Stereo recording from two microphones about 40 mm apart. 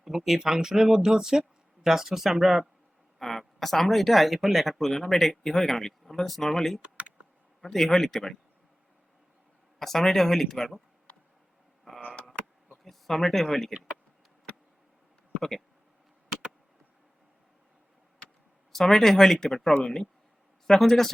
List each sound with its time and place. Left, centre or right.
0.0 s speech: centre
3.2 s speech: centre
6.8 s computer keyboard: right
7.6 s speech: centre
9.7 s speech: centre
11.9 s a sound: left
12.8 s speech: centre
15.3 s a sound: centre
18.7 s speech: centre
19.8 s speech: centre